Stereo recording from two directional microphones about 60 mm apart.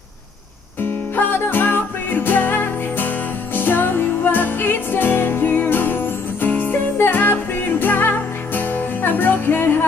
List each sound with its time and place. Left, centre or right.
0.7 s music: left